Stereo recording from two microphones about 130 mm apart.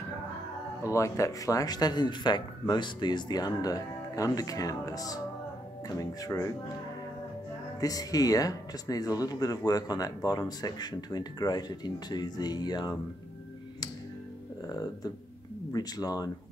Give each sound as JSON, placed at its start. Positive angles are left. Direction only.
{"t": 0.8, "sound": "speech", "side_deg": 25}
{"t": 7.8, "sound": "speech", "side_deg": 30}
{"t": 15.7, "sound": "speech", "side_deg": 30}